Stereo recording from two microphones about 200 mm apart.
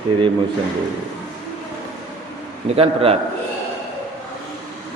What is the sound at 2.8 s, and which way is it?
Speech, 30° right (ahead or behind).